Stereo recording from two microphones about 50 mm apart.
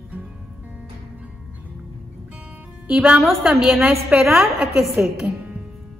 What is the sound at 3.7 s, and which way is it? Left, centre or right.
Speech, right.